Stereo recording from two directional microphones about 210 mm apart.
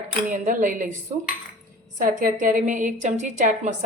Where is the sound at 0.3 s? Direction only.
40° right (ahead or behind).